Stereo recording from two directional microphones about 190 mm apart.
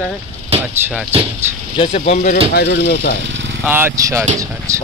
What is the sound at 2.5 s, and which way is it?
Speech, 55° left (ahead or behind).